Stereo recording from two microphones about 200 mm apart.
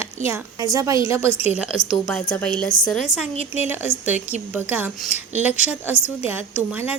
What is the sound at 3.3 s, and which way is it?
Speech, 35° left (ahead or behind).